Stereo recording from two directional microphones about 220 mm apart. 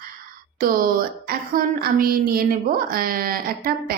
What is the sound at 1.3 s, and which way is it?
A woman's voice, 45° right (ahead or behind).